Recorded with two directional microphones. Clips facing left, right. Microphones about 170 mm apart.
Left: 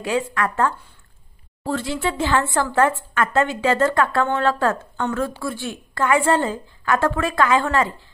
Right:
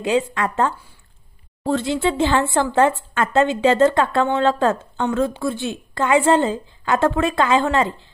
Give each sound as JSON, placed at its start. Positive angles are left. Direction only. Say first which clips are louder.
{"t": 0.0, "sound": "a woman's voice", "louder": "right 3 dB", "side_deg": -25}